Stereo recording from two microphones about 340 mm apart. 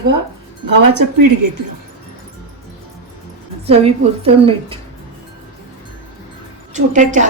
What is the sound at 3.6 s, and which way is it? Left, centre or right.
A woman's voice, centre.